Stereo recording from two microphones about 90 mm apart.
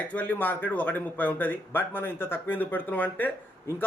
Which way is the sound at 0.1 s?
15° left (ahead or behind).